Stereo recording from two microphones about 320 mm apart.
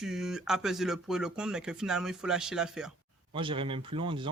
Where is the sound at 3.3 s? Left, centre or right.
Centre.